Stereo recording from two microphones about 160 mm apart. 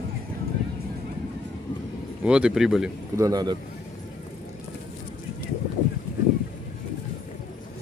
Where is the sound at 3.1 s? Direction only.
20° right (ahead or behind).